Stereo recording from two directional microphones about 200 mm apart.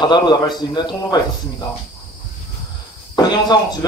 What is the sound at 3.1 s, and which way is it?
Speech, 20° left (ahead or behind).